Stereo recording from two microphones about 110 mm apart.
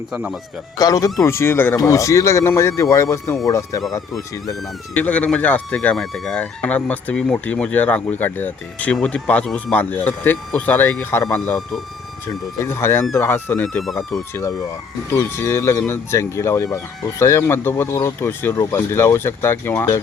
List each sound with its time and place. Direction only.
0.1 s speech: 5° right (ahead or behind)
0.8 s speech: 30° left (ahead or behind)
4.9 s speech: 15° left (ahead or behind)
12.5 s speech: 25° left (ahead or behind)